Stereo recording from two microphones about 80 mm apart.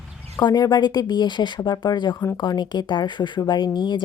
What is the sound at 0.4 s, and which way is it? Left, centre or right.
Speech, left.